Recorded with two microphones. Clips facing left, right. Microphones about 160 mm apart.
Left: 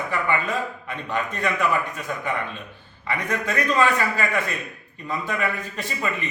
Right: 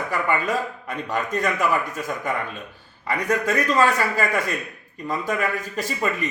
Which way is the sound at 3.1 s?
40° right (ahead or behind).